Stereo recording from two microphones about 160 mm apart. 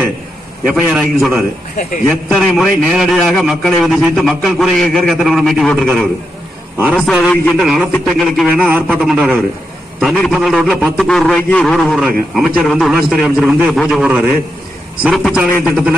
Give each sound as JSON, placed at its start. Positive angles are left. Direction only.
{"t": 0.7, "sound": "a man's voice", "side_deg": -5}
{"t": 8.6, "sound": "a man's voice", "side_deg": -10}
{"t": 15.0, "sound": "a man's voice", "side_deg": 0}